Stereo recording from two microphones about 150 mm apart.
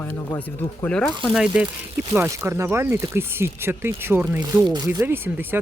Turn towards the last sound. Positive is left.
turn(degrees=-15)  # may be behind; listen again after turning